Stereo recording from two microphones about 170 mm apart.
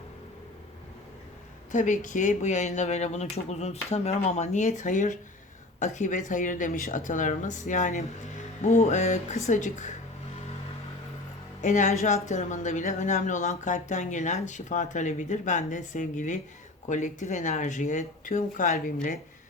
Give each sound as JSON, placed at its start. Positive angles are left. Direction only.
{"t": 1.7, "sound": "speech", "side_deg": 50}
{"t": 11.6, "sound": "speech", "side_deg": 45}